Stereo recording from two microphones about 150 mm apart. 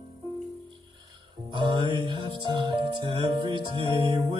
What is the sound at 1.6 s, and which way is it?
Music, 30° right (ahead or behind).